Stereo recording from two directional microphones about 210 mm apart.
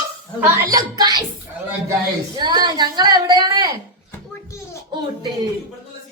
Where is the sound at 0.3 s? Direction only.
15° right (ahead or behind).